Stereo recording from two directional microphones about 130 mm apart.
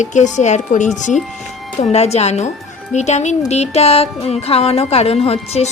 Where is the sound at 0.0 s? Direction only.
65° left (ahead or behind).